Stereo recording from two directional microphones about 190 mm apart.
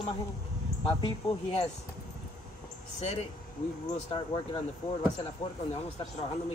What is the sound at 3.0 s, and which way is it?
A man's voice, 35° left (ahead or behind).